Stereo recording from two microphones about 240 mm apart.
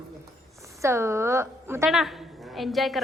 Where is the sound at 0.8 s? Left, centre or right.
Centre.